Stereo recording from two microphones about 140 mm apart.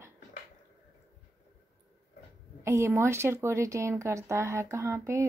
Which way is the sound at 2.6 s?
20° right (ahead or behind).